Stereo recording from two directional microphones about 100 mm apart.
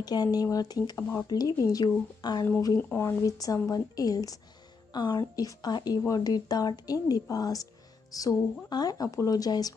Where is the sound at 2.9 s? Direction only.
30° left (ahead or behind).